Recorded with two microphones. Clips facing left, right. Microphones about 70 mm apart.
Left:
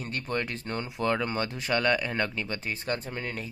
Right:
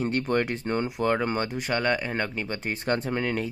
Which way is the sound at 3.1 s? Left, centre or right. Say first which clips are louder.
Right 8 dB; right.